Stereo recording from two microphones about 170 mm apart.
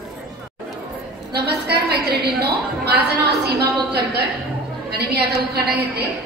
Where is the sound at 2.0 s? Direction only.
70° right (ahead or behind).